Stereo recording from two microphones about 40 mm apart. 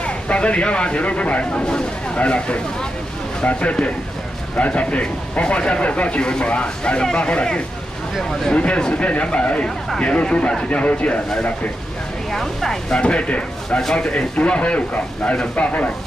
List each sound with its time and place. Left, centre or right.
0.0 s speech: left
3.4 s speech: left
4.6 s speech: left
8.2 s speech: centre
8.5 s speech: left
12.3 s speech: centre
12.9 s speech: left